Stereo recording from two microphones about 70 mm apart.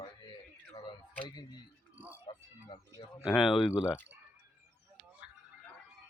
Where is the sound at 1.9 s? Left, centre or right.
Right.